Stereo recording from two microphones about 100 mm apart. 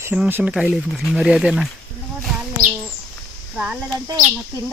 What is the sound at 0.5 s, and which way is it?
Speech, 5° right (ahead or behind).